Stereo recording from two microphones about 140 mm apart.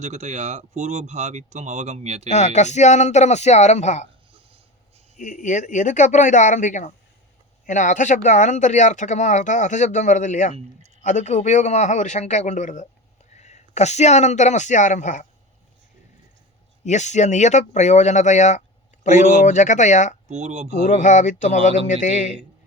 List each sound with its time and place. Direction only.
0.0 s speech: 55° right (ahead or behind)
2.3 s speech: 55° left (ahead or behind)
5.1 s speech: 60° left (ahead or behind)
16.8 s speech: 55° left (ahead or behind)
20.2 s speech: 55° right (ahead or behind)
20.8 s speech: 60° left (ahead or behind)